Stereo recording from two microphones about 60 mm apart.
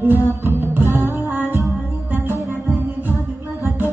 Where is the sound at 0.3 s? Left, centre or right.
Right.